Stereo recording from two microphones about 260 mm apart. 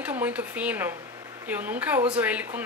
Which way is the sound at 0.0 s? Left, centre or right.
Centre.